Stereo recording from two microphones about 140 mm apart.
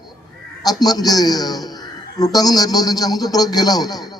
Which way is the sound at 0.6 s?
30° left (ahead or behind).